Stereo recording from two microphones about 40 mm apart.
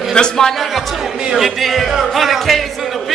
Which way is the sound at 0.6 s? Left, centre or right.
Centre.